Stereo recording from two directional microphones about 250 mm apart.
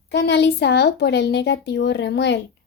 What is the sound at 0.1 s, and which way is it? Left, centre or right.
A woman's voice, left.